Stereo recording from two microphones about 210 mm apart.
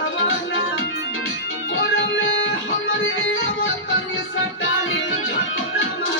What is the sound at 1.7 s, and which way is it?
Music, 65° left (ahead or behind).